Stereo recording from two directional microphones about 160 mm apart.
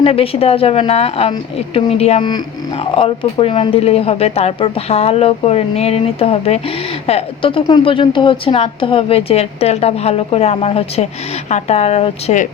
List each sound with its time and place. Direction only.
0.0 s a woman's voice: 35° left (ahead or behind)